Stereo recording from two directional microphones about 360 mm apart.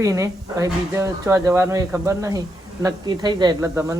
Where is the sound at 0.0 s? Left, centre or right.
Centre.